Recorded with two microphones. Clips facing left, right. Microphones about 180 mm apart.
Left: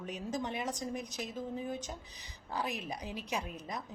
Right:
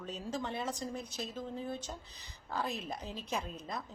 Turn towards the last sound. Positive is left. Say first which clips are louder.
# even
turn(degrees=15)  # may be behind; listen again after turning